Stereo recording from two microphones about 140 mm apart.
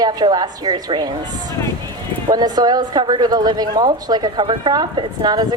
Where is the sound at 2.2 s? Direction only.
30° right (ahead or behind).